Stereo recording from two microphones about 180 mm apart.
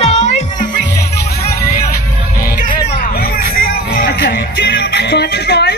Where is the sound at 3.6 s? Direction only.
60° left (ahead or behind).